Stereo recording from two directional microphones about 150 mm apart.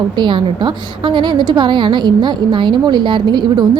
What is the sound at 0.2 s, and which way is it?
A woman's voice, 30° right (ahead or behind).